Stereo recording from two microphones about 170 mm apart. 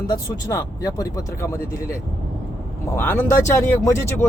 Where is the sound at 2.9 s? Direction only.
15° left (ahead or behind).